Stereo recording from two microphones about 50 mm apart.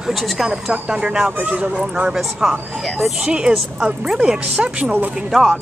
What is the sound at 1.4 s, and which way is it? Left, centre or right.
Speech, right.